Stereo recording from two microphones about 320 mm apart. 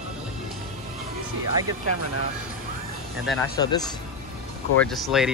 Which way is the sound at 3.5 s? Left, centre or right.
Centre.